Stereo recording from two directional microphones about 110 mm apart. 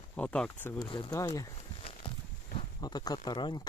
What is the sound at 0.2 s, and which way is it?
Speech, 10° left (ahead or behind).